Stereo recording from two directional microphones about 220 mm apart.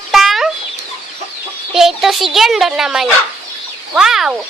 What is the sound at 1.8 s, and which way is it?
Speech, centre (ahead or behind).